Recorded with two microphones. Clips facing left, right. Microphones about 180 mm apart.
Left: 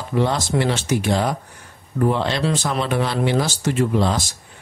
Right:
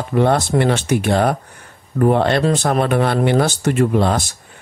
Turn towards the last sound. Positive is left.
turn(degrees=-55)  # may be behind; listen again after turning